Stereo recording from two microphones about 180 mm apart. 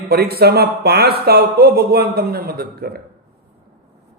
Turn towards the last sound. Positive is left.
turn(degrees=-60)  # may be behind; listen again after turning